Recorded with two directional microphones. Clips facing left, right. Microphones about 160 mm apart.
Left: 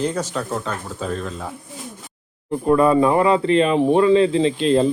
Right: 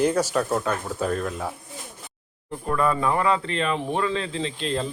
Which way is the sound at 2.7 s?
20° left (ahead or behind).